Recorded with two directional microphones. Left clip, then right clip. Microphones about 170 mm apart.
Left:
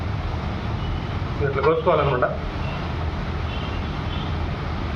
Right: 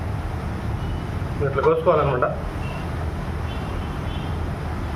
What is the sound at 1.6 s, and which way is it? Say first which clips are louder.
Speech: right 1 dB; 20° right (ahead or behind).